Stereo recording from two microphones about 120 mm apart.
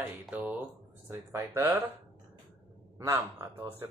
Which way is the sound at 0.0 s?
15° right (ahead or behind).